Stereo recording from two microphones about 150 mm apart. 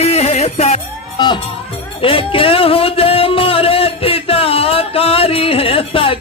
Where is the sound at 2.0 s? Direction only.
35° left (ahead or behind).